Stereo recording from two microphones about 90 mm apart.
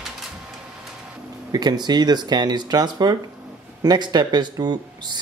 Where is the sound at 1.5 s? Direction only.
50° right (ahead or behind).